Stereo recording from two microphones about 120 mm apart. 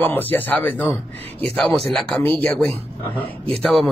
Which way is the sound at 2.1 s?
15° left (ahead or behind).